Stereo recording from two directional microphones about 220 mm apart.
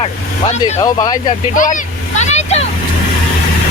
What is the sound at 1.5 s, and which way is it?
Vehicle, 35° left (ahead or behind).